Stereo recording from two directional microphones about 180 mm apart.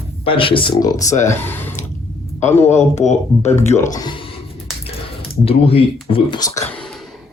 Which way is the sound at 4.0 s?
25° left (ahead or behind).